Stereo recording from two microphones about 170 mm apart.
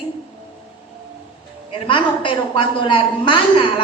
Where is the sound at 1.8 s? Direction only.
30° left (ahead or behind).